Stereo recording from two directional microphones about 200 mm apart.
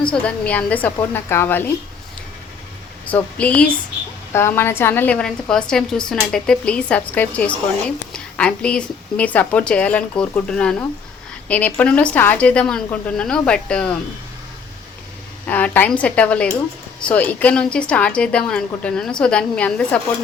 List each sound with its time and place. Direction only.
0.0 s a woman's voice: 5° left (ahead or behind)
3.3 s a woman's voice: 5° left (ahead or behind)
15.4 s a woman's voice: 10° left (ahead or behind)